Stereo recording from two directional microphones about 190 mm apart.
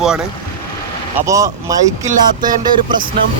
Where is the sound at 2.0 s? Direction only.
45° right (ahead or behind).